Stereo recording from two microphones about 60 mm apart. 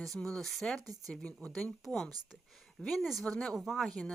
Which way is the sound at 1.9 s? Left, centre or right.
Centre.